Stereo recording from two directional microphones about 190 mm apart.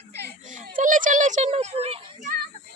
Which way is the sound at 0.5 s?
45° right (ahead or behind).